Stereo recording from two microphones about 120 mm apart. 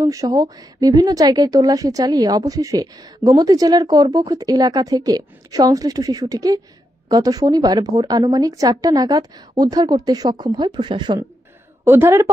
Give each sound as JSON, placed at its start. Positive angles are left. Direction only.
{"t": 0.0, "sound": "a woman's voice", "side_deg": -30}
{"t": 11.8, "sound": "a woman's voice", "side_deg": -20}